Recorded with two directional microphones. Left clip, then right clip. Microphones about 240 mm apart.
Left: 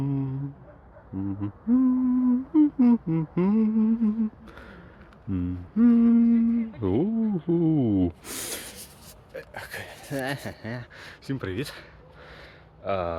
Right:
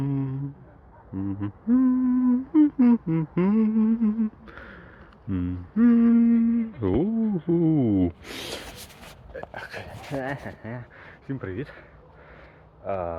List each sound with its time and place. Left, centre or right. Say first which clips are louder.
0.0 s a sound: right 1 dB; centre
1.4 s humming: right 1 dB; centre
5.3 s speech: right 1 dB; centre
9.3 s a sound: right 1 dB; centre
10.2 s speech: left 1 dB; left
12.8 s speech: left 1 dB; left